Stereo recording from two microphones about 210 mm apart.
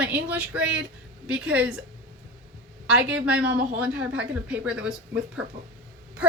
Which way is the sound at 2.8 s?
5° right (ahead or behind).